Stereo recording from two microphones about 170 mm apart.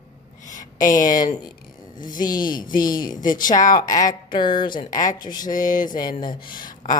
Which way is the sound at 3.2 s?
55° left (ahead or behind).